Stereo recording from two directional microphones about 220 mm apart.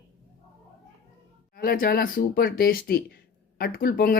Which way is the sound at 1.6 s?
40° left (ahead or behind).